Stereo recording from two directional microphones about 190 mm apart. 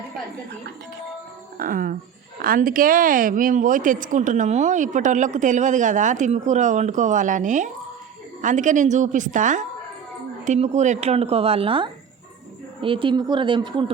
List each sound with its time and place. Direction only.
1.5 s speech: 45° right (ahead or behind); by 13.9 s 25° right (ahead or behind)